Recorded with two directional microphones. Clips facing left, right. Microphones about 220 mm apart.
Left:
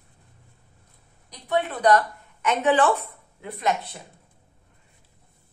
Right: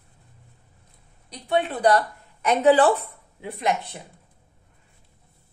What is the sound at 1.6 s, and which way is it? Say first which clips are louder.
A woman's voice: left 1 dB; 30° right (ahead or behind).